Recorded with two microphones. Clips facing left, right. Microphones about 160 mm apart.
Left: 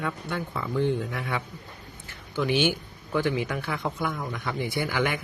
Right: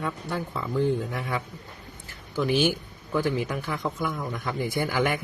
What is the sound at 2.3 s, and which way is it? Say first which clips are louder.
Speech: right 1 dB; 40° right (ahead or behind).